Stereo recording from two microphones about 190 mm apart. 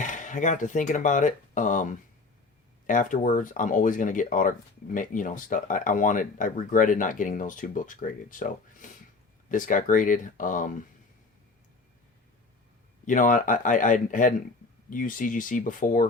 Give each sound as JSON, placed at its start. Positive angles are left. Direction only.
{"t": 0.0, "sound": "speech", "side_deg": 40}
{"t": 13.1, "sound": "speech", "side_deg": 45}